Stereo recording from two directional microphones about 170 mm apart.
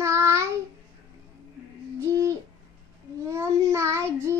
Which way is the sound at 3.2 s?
15° right (ahead or behind).